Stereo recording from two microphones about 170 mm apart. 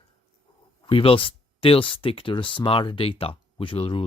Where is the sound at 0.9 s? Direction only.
30° left (ahead or behind).